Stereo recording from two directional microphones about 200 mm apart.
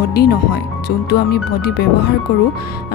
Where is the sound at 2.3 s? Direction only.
60° left (ahead or behind).